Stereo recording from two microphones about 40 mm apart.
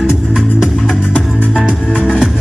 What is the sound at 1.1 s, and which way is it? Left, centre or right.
Music, left.